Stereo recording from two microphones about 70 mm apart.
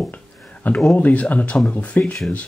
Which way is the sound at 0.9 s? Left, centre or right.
Left.